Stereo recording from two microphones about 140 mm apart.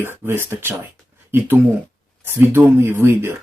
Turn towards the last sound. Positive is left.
turn(degrees=-20)  # may be behind; listen again after turning